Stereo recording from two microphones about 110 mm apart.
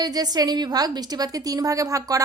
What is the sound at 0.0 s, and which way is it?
Speech, 35° right (ahead or behind).